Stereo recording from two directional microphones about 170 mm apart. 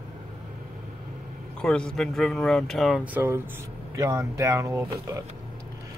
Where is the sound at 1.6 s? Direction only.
5° left (ahead or behind).